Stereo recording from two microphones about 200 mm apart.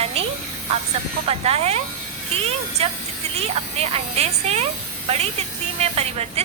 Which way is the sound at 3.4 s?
30° right (ahead or behind).